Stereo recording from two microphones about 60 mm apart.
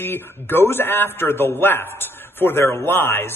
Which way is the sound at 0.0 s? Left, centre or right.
Left.